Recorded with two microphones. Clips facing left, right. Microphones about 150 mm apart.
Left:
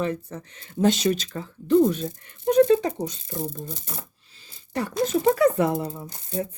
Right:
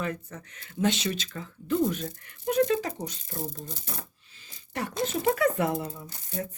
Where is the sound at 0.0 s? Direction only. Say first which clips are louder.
Left 6 dB; 30° left (ahead or behind).